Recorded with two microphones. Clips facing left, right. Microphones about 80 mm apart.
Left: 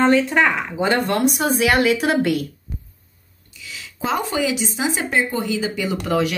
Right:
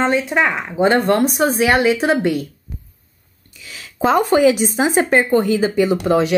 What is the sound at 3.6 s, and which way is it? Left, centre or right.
Speech, right.